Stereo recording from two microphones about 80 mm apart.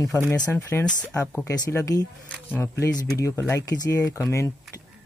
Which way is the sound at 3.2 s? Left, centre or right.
Left.